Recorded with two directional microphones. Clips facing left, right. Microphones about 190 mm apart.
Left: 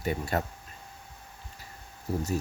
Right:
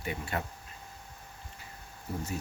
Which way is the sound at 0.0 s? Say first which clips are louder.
Left 6 dB; 40° left (ahead or behind).